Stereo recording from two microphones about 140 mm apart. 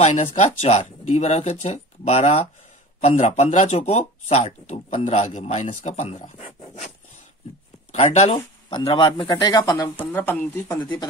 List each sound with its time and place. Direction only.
0.0 s speech: 45° left (ahead or behind)
7.9 s speech: 55° left (ahead or behind)
8.4 s speech: 35° left (ahead or behind)
10.1 s speech: 10° left (ahead or behind)